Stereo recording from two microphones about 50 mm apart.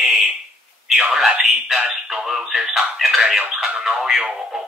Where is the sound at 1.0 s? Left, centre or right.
Centre.